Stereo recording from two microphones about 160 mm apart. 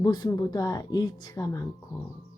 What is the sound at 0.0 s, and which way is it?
Speech, 25° left (ahead or behind).